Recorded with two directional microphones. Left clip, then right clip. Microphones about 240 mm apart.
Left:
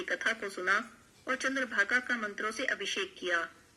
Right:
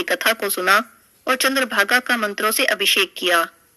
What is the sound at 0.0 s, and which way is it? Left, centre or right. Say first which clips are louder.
Speech: right 13 dB; right.